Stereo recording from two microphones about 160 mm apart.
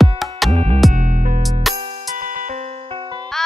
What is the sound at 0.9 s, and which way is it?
Music, 55° right (ahead or behind).